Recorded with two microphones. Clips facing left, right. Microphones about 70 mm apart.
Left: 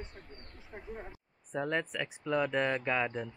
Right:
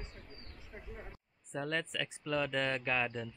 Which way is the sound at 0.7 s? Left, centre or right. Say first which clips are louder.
Left 5 dB; left.